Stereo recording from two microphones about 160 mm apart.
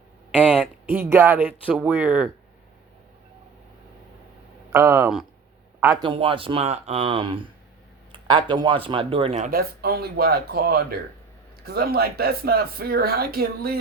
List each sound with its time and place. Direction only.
0.3 s speech: 5° right (ahead or behind)
4.7 s speech: 15° right (ahead or behind)
6.0 s speech: 30° right (ahead or behind)
9.5 s speech: 70° right (ahead or behind)